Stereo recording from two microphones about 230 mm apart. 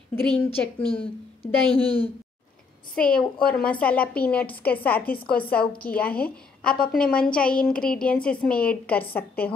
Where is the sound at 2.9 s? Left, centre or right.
Centre.